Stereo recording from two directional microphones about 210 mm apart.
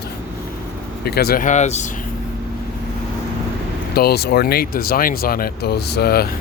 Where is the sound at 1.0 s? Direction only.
50° left (ahead or behind); by 1.9 s 35° left (ahead or behind).